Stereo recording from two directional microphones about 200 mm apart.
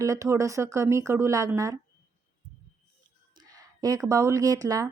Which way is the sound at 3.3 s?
20° right (ahead or behind).